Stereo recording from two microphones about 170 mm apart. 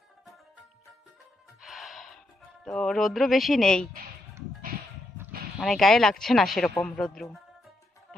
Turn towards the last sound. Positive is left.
turn(degrees=5)  # may be behind; listen again after turning